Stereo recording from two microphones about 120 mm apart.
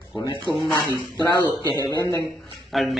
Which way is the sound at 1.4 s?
35° left (ahead or behind).